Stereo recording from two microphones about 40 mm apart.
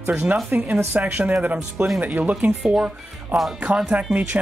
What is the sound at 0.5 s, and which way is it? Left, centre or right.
Speech, right.